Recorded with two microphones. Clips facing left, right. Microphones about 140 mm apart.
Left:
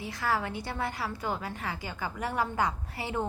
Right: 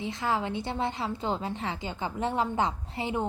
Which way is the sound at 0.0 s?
20° right (ahead or behind).